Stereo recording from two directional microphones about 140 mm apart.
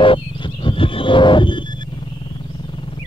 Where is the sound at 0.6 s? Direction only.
40° left (ahead or behind).